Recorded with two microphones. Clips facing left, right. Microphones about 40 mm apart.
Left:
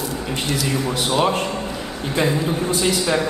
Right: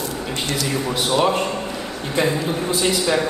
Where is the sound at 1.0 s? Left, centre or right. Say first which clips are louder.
Right 1 dB; left.